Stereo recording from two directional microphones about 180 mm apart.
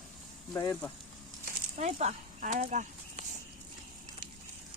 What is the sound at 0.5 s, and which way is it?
Speech, 15° left (ahead or behind).